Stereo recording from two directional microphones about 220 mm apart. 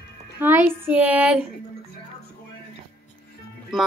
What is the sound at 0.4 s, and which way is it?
A woman's voice, 10° right (ahead or behind).